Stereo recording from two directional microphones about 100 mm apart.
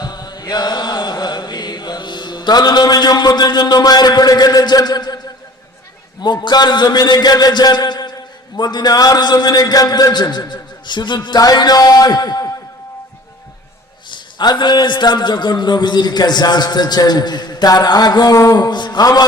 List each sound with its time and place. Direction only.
0.0 s chant: 45° left (ahead or behind)
6.1 s a man's voice: 50° left (ahead or behind)
14.1 s a man's voice: 50° left (ahead or behind)